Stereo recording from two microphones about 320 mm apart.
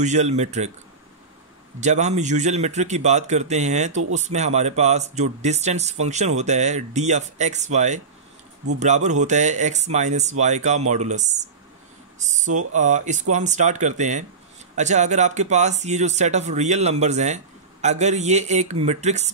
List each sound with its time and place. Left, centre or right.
0.0 s speech: right
1.8 s speech: right